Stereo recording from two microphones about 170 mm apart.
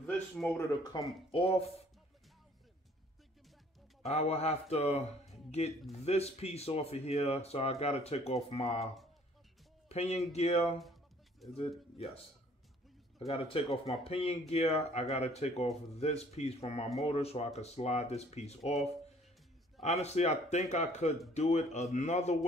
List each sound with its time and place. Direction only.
0.0 s speech: 10° left (ahead or behind)
0.9 s speech: 25° left (ahead or behind)
1.3 s speech: 35° left (ahead or behind)
4.0 s speech: 40° left (ahead or behind)
9.8 s speech: 40° left (ahead or behind)
13.3 s speech: 35° left (ahead or behind)